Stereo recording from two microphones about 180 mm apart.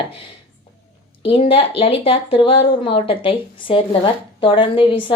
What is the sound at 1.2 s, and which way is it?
Speech, 30° left (ahead or behind).